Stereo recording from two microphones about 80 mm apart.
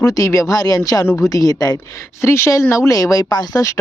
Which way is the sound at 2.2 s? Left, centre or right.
Left.